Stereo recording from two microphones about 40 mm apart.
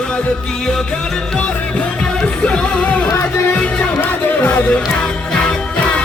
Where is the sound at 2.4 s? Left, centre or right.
Left.